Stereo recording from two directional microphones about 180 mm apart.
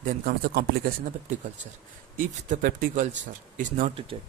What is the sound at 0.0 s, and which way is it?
Speech, 55° right (ahead or behind).